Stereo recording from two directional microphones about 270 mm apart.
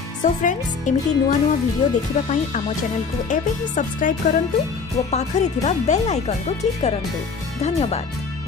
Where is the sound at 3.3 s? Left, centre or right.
Left.